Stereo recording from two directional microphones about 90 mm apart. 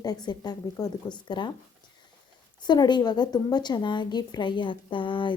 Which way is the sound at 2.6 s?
55° left (ahead or behind).